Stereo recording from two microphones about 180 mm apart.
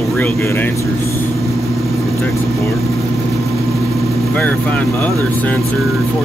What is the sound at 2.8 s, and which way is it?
Vehicle, centre (ahead or behind).